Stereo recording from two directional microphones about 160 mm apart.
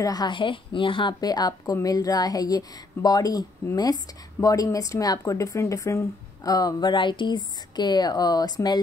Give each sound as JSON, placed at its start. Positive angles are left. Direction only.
{"t": 0.0, "sound": "a woman's voice", "side_deg": 25}